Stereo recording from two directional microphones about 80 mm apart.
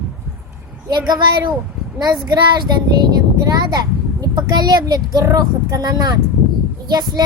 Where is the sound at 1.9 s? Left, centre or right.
Right.